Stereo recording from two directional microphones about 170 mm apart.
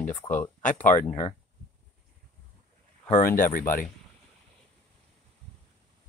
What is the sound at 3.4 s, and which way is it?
Speech, 55° left (ahead or behind).